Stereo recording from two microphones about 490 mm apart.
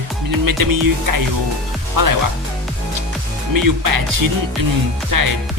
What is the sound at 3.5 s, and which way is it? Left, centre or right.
Speech, right.